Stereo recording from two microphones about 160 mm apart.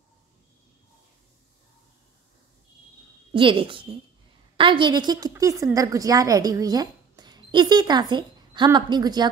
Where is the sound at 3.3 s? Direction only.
30° right (ahead or behind).